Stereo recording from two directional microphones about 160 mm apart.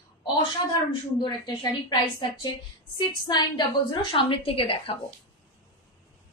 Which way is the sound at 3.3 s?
30° left (ahead or behind).